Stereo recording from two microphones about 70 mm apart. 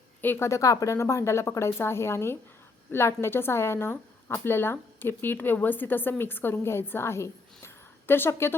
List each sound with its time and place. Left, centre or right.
0.2 s a woman's voice: left
0.4 s a woman's voice: left